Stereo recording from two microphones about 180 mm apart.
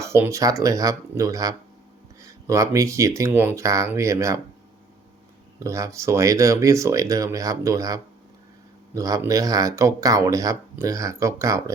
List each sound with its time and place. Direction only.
0.0 s speech: 15° right (ahead or behind)
5.5 s speech: 15° right (ahead or behind)